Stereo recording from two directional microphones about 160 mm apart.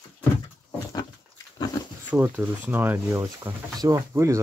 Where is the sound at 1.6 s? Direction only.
25° left (ahead or behind).